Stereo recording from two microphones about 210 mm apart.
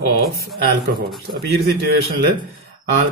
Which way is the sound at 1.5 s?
45° right (ahead or behind).